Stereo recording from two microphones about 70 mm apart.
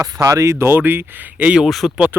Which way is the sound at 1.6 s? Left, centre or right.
Centre.